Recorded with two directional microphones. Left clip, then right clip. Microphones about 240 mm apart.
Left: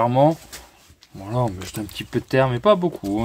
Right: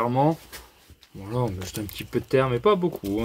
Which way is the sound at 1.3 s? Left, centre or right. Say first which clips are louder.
Left 4 dB; left.